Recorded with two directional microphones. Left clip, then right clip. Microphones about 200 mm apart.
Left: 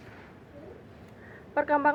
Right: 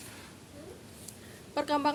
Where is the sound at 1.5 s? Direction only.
35° right (ahead or behind).